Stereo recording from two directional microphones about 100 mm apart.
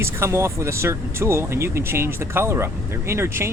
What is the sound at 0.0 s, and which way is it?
Speech, 25° right (ahead or behind).